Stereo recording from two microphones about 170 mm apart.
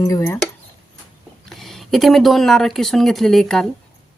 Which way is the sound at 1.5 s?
Centre (ahead or behind).